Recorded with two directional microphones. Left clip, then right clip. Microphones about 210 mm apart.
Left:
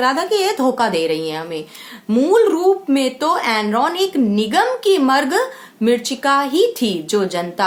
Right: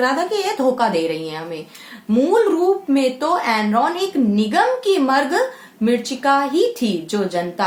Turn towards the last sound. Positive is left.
turn(degrees=35)  # may be behind; listen again after turning